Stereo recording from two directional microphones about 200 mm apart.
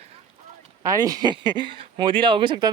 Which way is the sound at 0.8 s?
20° right (ahead or behind).